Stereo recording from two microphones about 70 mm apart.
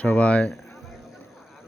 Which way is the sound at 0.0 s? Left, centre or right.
Centre.